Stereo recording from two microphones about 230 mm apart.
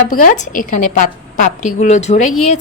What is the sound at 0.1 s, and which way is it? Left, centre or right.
A woman's voice, left.